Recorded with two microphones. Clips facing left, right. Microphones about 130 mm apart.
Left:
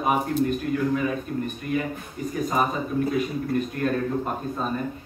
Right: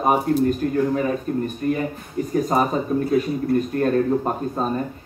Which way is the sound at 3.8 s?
40° right (ahead or behind).